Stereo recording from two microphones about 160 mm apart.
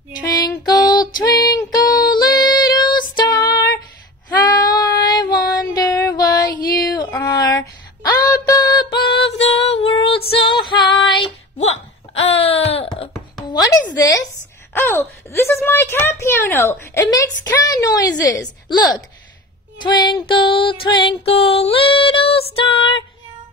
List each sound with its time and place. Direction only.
0.7 s female singing: 25° left (ahead or behind)
4.6 s child singing: 25° left (ahead or behind)
6.6 s female singing: 25° left (ahead or behind)
7.2 s a sound: 25° left (ahead or behind)
8.3 s music: 20° left (ahead or behind)
9.3 s female singing: 40° left (ahead or behind)
11.5 s a sound: 40° left (ahead or behind)
13.7 s a sound: 20° left (ahead or behind)
19.8 s music: 25° left (ahead or behind)